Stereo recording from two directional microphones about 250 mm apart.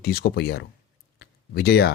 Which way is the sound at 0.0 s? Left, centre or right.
Left.